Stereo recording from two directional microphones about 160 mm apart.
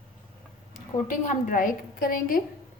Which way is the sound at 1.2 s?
50° left (ahead or behind).